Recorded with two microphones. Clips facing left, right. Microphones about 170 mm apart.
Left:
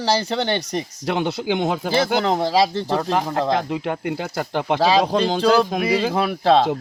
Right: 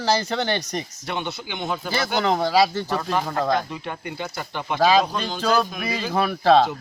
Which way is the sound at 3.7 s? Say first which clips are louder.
Left 8 dB; 90° left.